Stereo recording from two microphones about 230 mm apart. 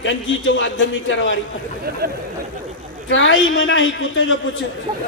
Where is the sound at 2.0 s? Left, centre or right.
Right.